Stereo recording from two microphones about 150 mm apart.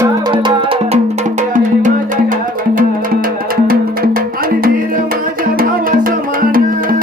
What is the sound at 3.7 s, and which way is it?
Music, 75° right (ahead or behind).